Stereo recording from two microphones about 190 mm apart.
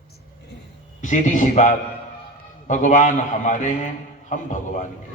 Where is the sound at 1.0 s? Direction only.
40° left (ahead or behind).